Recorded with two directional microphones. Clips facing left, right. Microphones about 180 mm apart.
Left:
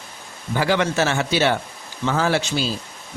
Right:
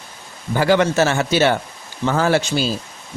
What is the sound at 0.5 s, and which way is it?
A man's voice, 45° right (ahead or behind).